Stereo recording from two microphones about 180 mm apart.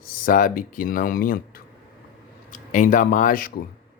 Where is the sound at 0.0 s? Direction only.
50° left (ahead or behind).